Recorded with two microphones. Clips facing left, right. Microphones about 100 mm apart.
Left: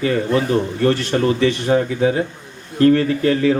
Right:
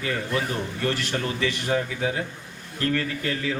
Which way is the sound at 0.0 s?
35° left (ahead or behind).